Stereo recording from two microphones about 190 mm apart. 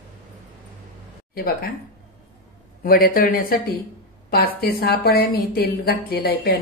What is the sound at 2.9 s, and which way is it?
A woman's voice, 50° left (ahead or behind).